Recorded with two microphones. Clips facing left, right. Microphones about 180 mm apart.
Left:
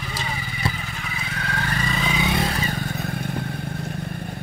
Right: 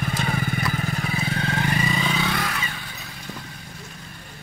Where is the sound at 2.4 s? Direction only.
35° left (ahead or behind); by 3.9 s 60° left (ahead or behind).